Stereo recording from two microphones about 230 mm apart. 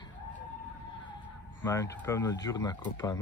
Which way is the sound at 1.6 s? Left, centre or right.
Centre.